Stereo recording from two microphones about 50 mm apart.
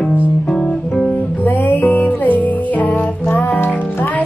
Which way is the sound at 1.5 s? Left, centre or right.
Left.